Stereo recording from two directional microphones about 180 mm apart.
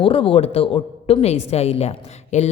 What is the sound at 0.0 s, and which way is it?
Speech, 30° left (ahead or behind).